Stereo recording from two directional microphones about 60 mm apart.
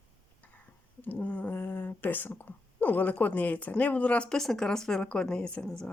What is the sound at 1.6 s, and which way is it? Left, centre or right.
Speech, left.